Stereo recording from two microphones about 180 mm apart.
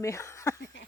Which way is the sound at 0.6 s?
90° left.